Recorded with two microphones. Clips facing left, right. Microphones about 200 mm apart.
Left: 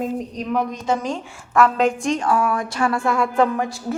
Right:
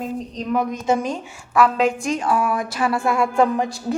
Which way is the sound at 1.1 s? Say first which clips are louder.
Even; 5° right (ahead or behind).